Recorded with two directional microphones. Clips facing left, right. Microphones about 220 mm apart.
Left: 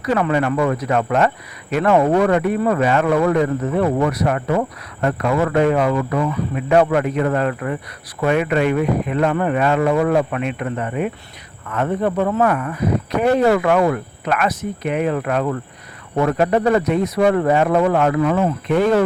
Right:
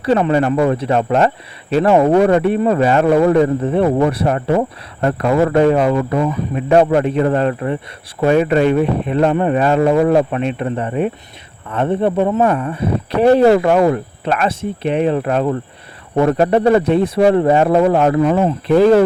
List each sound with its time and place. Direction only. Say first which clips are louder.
0.0 s speech: right 4 dB; 30° right (ahead or behind)